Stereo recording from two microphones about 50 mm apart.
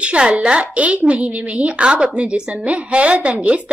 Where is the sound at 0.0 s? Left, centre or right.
Right.